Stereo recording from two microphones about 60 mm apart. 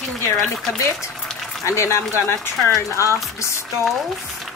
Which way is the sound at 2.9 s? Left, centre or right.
Right.